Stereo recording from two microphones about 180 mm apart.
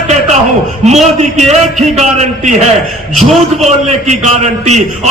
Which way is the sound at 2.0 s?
40° right (ahead or behind).